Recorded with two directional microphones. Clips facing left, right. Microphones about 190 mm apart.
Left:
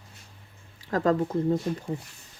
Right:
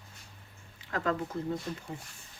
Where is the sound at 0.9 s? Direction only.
40° left (ahead or behind).